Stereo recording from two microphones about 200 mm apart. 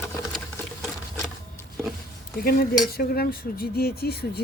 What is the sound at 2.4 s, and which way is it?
Speech, 45° left (ahead or behind).